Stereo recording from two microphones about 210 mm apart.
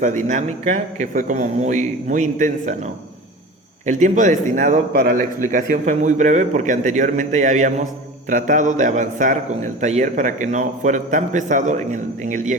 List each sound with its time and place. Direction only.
0.3 s a man's voice: 35° right (ahead or behind)